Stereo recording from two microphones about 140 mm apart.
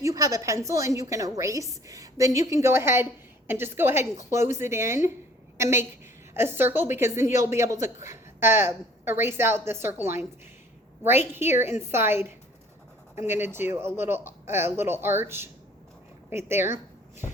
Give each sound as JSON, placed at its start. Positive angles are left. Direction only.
{"t": 0.0, "sound": "a woman's voice", "side_deg": -25}